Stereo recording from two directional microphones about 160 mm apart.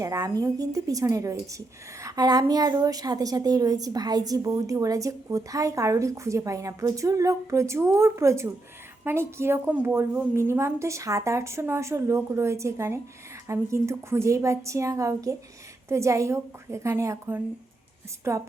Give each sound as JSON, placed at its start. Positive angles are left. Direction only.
{"t": 0.0, "sound": "a woman's voice", "side_deg": -20}